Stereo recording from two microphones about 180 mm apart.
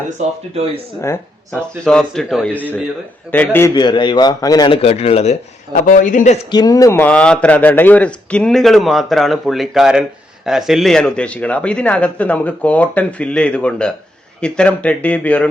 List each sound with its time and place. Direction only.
0.2 s speech: 35° right (ahead or behind)
1.0 s a man's voice: 10° left (ahead or behind)
3.8 s a man's voice: 25° left (ahead or behind); by 6.4 s 40° left (ahead or behind)
6.5 s a man's voice: 20° left (ahead or behind)